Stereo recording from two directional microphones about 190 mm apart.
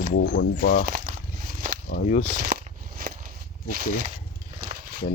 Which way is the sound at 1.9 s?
45° left (ahead or behind).